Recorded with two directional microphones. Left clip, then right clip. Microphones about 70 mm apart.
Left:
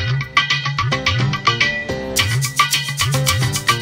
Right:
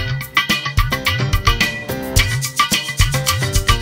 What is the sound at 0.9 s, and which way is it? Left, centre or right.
Music, left.